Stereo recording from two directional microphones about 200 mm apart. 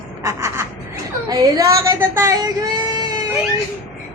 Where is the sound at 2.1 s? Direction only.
15° right (ahead or behind).